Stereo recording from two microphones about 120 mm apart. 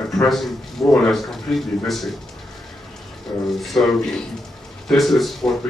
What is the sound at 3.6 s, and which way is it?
A man's voice, centre (ahead or behind).